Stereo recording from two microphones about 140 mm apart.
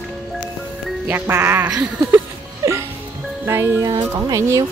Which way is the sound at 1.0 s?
15° right (ahead or behind).